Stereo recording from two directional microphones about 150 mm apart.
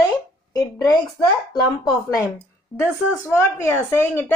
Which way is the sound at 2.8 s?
15° left (ahead or behind).